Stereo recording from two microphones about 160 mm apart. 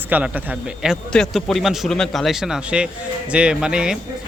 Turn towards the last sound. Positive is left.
turn(degrees=-5)  # may be behind; listen again after turning